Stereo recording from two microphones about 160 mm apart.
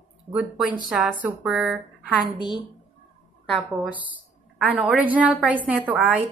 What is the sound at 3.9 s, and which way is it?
A woman's voice, 10° right (ahead or behind).